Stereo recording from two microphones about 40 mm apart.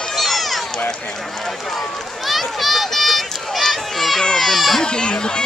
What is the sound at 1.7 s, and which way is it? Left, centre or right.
Run, centre.